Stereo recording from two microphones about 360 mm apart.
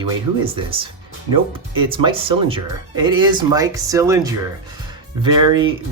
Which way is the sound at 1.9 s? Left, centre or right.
Centre.